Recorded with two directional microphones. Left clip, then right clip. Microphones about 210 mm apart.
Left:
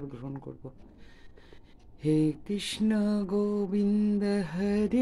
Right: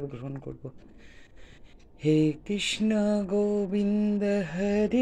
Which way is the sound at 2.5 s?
10° left (ahead or behind).